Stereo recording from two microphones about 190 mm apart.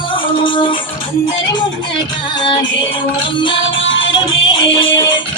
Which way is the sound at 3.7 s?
85° left.